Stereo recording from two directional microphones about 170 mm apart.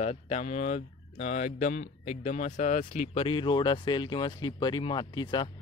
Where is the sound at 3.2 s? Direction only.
30° left (ahead or behind).